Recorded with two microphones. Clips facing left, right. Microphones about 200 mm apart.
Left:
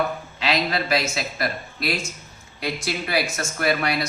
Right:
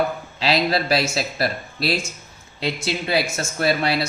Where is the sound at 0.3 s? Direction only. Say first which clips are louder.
Right 4 dB; 35° right (ahead or behind).